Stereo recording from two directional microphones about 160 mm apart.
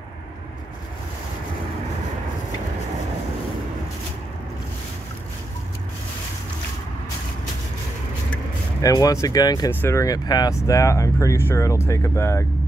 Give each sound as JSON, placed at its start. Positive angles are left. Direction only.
{"t": 8.8, "sound": "speech", "side_deg": 20}